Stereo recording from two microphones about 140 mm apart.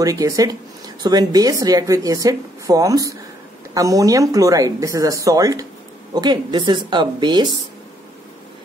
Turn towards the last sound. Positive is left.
turn(degrees=-30)  # may be behind; listen again after turning